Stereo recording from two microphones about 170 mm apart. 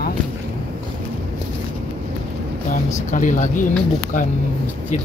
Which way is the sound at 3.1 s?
50° left (ahead or behind).